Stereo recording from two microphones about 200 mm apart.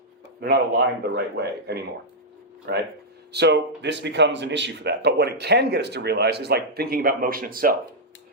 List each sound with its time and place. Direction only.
0.3 s speech: 55° right (ahead or behind)